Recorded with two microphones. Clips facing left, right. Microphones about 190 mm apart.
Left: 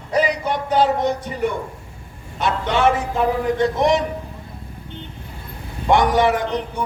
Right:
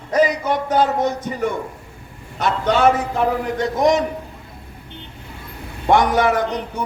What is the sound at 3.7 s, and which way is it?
Speech, 40° right (ahead or behind).